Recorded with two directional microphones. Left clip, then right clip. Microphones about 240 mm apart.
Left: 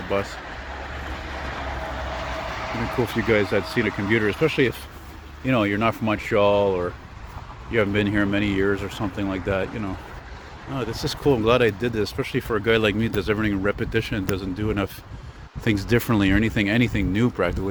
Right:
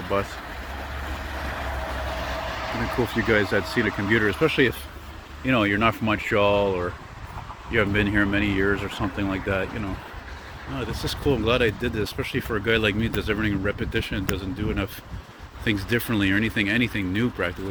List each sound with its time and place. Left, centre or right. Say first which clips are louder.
0.1 s speech: even; centre
2.3 s a sound: even; centre
3.8 s speech: right 1 dB; centre
10.8 s speech: left 2 dB; left